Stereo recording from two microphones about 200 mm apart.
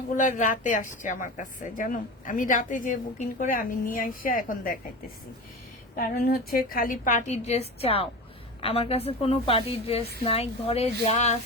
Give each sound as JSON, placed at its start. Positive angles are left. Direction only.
{"t": 0.1, "sound": "a woman's voice", "side_deg": 40}
{"t": 6.0, "sound": "a woman's voice", "side_deg": 50}